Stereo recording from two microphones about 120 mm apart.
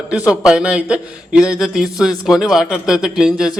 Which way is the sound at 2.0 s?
5° right (ahead or behind).